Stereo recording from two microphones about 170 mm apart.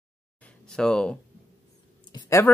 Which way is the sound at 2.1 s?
20° left (ahead or behind).